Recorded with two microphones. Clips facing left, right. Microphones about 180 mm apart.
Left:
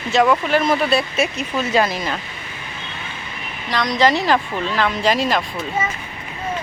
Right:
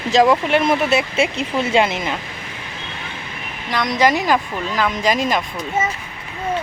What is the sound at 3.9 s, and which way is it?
Speech, 15° right (ahead or behind).